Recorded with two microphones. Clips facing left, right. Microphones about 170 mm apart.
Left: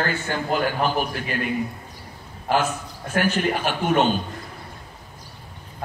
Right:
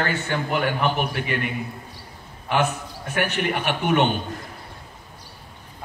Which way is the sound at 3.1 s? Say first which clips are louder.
Left 2 dB; 65° right (ahead or behind).